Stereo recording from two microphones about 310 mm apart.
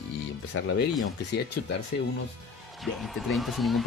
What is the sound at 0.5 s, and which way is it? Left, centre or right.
Speech, left.